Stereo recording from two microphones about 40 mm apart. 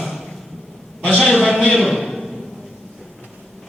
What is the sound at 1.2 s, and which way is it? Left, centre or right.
Speech, centre.